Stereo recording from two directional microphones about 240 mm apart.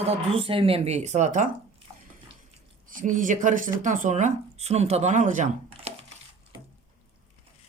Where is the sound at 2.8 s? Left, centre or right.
Right.